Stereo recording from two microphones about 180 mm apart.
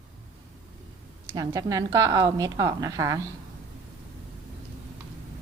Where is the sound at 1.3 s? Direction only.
20° right (ahead or behind).